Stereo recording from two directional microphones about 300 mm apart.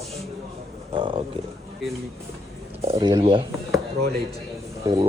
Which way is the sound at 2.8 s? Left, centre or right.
Centre.